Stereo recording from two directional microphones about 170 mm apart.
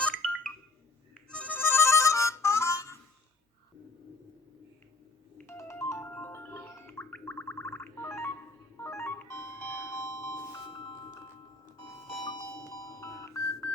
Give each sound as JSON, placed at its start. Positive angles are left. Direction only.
{"t": 0.0, "sound": "music", "side_deg": 5}
{"t": 5.4, "sound": "gargling", "side_deg": 15}
{"t": 8.8, "sound": "music", "side_deg": 15}
{"t": 10.7, "sound": "music", "side_deg": 25}
{"t": 12.2, "sound": "music", "side_deg": 25}